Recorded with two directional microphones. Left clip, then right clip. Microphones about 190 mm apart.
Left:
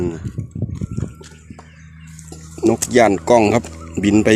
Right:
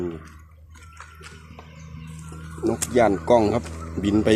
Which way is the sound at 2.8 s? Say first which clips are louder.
Left 4 dB; 45° left (ahead or behind).